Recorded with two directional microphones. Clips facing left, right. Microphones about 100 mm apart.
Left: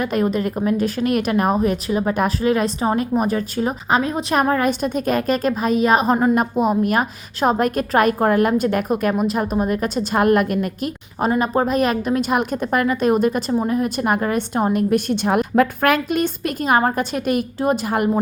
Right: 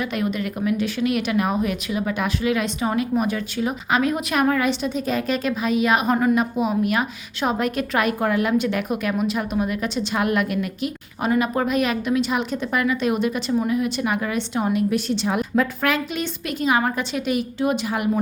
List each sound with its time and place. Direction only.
0.0 s a woman's voice: 40° left (ahead or behind)
6.3 s a woman's voice: 45° left (ahead or behind)
11.3 s a woman's voice: 30° left (ahead or behind)